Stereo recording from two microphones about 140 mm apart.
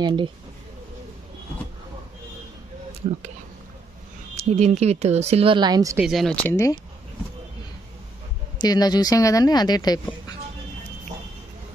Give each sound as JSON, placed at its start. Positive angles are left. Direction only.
{"t": 0.0, "sound": "speech", "side_deg": -35}
{"t": 4.4, "sound": "speech", "side_deg": -55}
{"t": 5.9, "sound": "speech", "side_deg": 0}
{"t": 6.4, "sound": "speech", "side_deg": 20}
{"t": 8.5, "sound": "speech", "side_deg": 30}